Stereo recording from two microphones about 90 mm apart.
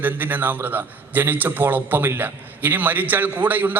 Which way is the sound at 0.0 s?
20° right (ahead or behind).